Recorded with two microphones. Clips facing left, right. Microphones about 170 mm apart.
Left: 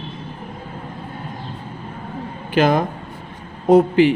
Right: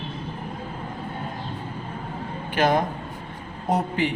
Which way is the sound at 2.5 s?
90° left.